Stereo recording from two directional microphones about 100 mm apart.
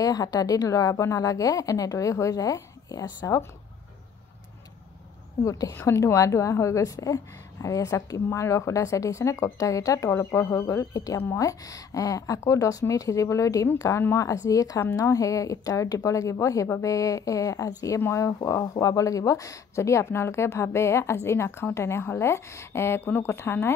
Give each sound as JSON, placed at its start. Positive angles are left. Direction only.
{"t": 0.0, "sound": "a woman's voice", "side_deg": 40}
{"t": 5.4, "sound": "a woman's voice", "side_deg": 35}